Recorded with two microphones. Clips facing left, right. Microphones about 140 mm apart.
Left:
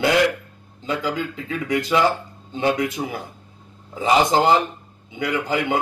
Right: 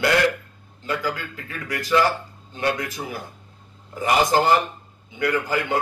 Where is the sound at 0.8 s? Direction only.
20° left (ahead or behind).